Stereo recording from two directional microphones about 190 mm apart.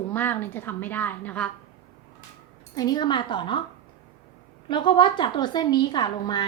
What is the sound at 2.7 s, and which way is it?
Speech, 20° left (ahead or behind).